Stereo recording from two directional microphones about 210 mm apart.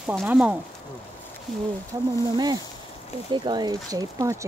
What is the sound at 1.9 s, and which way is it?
Speech, 15° right (ahead or behind).